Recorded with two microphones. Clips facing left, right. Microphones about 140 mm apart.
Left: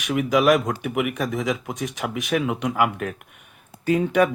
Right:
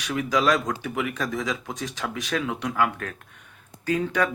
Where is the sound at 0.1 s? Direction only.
15° left (ahead or behind).